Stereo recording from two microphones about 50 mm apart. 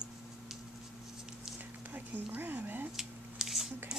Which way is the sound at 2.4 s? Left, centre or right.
Right.